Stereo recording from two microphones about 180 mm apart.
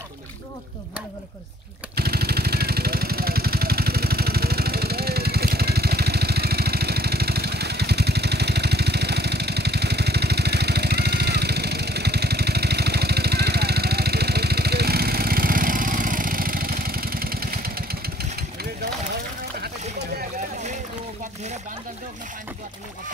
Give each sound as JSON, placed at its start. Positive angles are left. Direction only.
{"t": 2.0, "sound": "vehicle", "side_deg": -60}